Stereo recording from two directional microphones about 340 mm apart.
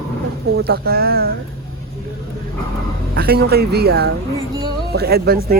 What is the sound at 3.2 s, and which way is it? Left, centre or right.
A man's voice, right.